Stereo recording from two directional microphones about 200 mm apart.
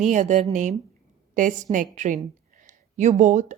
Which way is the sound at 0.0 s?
35° right (ahead or behind).